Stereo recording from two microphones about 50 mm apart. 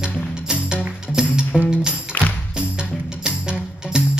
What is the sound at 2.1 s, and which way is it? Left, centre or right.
Music, left.